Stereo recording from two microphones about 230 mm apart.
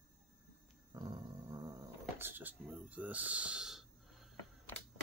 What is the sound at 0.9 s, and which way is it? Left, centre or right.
Dog, centre.